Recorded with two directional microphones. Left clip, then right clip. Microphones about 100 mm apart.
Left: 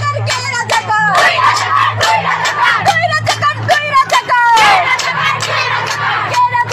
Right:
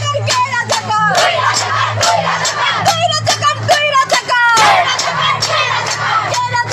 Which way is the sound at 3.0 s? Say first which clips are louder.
Left 1 dB; 20° right (ahead or behind).